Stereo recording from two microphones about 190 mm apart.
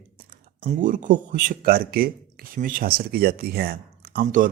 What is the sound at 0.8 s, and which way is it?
Speech, 45° right (ahead or behind).